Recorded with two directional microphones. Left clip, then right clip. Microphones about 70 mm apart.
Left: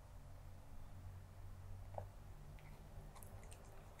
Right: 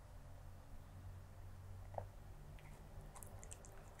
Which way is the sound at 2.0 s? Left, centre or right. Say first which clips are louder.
Right 2 dB; right.